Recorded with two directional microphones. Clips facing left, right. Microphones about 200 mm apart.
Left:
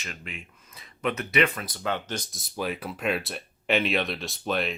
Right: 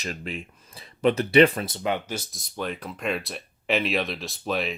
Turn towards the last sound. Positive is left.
turn(degrees=0)  # may be behind; listen again after turning